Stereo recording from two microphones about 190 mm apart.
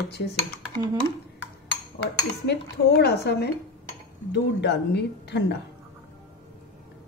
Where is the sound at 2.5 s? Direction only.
60° left (ahead or behind).